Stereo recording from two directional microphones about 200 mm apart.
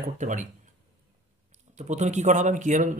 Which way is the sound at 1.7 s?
35° right (ahead or behind).